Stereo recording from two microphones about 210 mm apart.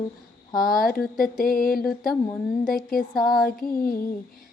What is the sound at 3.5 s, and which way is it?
Female singing, 45° left (ahead or behind).